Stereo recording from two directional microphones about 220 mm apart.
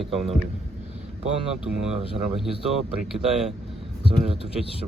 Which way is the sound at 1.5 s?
5° right (ahead or behind).